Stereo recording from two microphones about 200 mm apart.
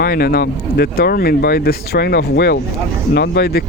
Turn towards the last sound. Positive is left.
turn(degrees=50)  # may be behind; listen again after turning